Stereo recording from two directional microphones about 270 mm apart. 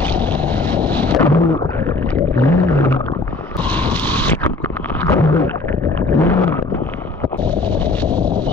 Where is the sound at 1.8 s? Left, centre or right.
Centre.